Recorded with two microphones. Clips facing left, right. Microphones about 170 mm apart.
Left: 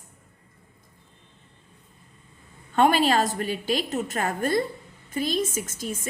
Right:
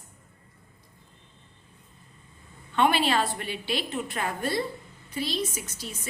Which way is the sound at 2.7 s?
45° left (ahead or behind).